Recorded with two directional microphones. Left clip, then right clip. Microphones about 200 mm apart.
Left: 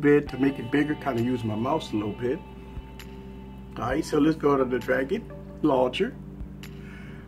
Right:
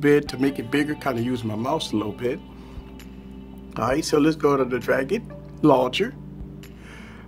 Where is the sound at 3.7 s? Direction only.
50° right (ahead or behind).